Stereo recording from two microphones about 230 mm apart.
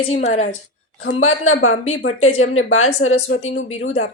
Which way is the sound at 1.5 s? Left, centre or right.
Left.